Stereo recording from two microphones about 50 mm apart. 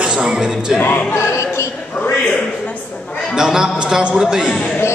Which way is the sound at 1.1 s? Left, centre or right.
Left.